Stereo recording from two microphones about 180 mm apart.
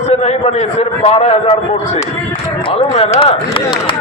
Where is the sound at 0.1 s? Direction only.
35° left (ahead or behind).